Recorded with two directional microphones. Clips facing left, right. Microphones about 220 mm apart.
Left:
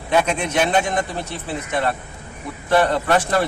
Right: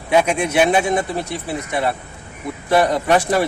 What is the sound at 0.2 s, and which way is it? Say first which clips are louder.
Speech: right 4 dB; 10° right (ahead or behind).